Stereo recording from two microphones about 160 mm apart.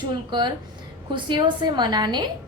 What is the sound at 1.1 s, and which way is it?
A woman's voice, 30° right (ahead or behind).